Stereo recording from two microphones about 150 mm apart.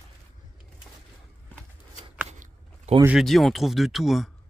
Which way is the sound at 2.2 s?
45° right (ahead or behind).